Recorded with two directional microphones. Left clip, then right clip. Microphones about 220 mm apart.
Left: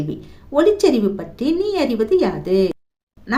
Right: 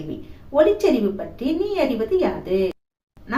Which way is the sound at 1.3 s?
55° left (ahead or behind).